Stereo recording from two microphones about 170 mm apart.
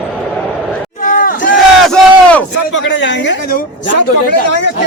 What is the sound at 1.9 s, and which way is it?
Battle cry, 5° left (ahead or behind).